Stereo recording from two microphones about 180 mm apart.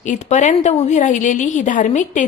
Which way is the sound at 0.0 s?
40° left (ahead or behind).